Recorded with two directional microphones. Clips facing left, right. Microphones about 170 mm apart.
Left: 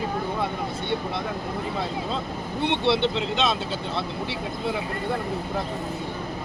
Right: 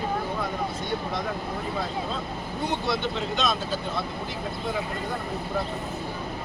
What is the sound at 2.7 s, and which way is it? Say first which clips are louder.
Speech: left 6 dB; 30° left (ahead or behind).